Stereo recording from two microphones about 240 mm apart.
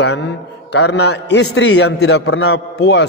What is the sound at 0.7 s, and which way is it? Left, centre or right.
A man's voice, left.